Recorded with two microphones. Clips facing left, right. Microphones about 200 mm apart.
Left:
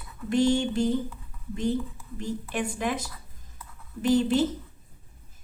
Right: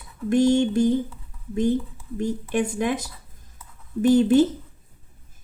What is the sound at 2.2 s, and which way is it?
Speech, 50° right (ahead or behind).